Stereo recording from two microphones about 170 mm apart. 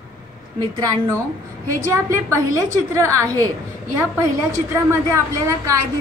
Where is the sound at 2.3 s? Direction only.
20° right (ahead or behind).